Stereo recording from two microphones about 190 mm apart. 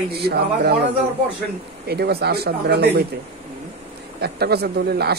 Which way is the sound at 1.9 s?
55° right (ahead or behind).